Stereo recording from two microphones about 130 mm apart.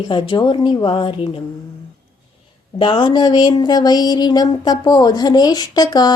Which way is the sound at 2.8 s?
40° left (ahead or behind).